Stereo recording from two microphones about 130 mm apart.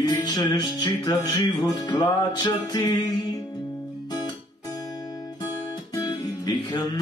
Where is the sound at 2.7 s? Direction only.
30° left (ahead or behind).